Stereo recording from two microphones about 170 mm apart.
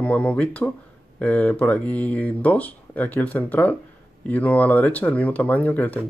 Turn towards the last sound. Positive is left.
turn(degrees=10)  # may be behind; listen again after turning